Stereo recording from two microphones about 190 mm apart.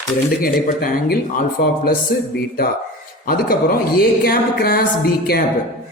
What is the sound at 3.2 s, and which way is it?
A woman's voice, 50° left (ahead or behind).